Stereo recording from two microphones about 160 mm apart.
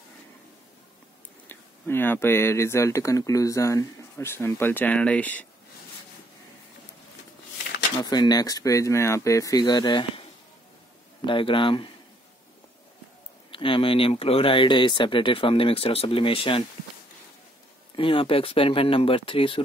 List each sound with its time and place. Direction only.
1.5 s speech: 15° left (ahead or behind)
8.0 s speech: 25° left (ahead or behind)
11.2 s speech: 30° left (ahead or behind)
13.5 s speech: 35° left (ahead or behind)
17.9 s speech: 35° left (ahead or behind)